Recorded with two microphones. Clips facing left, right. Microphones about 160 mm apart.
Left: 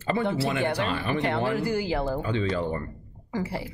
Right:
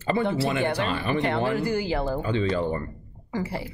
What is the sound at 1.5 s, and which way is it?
Speech, 5° left (ahead or behind).